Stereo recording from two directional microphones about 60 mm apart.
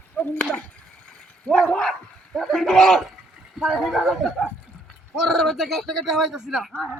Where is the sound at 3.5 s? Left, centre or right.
Centre.